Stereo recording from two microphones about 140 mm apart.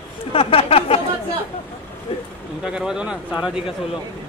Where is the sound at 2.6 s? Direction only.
5° right (ahead or behind).